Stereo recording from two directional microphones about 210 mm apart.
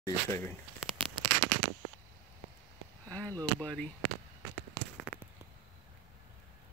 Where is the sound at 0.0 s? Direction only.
15° left (ahead or behind).